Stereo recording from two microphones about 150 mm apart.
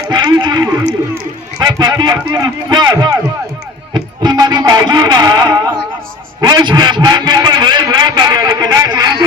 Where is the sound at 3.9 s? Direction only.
30° right (ahead or behind).